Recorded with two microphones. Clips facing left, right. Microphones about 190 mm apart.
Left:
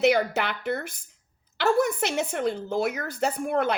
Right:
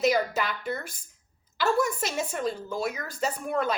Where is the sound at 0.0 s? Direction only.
65° left (ahead or behind).